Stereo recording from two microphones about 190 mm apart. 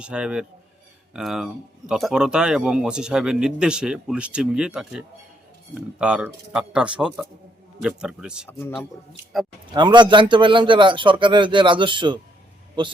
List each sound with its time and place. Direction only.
0.0 s speech: 5° right (ahead or behind)
8.4 s a man's voice: 10° left (ahead or behind)
9.7 s a man's voice: 25° right (ahead or behind)